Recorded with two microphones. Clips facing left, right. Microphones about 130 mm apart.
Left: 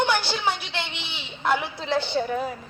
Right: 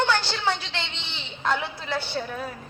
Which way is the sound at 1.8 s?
20° left (ahead or behind).